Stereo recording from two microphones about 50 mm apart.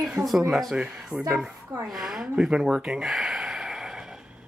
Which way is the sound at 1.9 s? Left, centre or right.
Centre.